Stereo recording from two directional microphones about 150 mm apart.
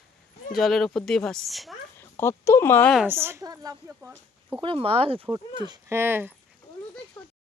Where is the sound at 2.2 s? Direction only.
15° left (ahead or behind).